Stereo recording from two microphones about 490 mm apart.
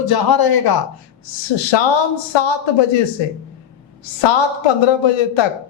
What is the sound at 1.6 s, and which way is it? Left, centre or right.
A man's voice, left.